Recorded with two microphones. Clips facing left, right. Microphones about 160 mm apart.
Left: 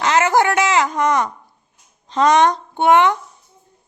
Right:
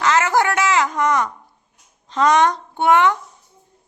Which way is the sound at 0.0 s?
20° left (ahead or behind).